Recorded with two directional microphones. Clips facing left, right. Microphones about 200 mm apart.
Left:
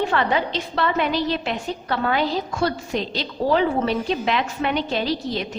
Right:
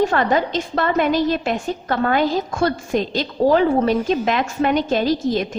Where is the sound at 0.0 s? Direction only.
45° right (ahead or behind).